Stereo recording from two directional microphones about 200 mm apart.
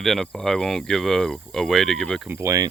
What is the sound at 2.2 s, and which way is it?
Speech, 15° right (ahead or behind).